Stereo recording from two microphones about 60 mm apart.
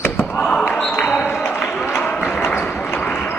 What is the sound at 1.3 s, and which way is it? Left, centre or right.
Run, left.